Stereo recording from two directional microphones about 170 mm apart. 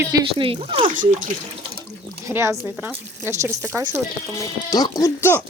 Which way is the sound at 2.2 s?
15° right (ahead or behind).